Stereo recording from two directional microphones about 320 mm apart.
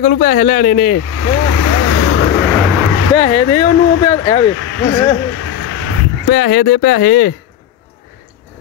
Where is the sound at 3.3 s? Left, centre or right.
Left.